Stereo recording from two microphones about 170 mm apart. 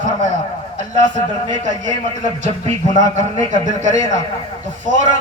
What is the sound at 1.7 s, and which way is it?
A man's voice, 45° right (ahead or behind).